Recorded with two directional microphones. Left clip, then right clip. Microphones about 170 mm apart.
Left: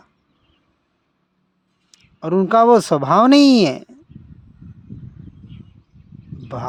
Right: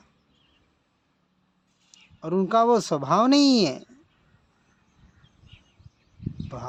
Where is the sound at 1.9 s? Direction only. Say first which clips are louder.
Left 8 dB; 45° left (ahead or behind).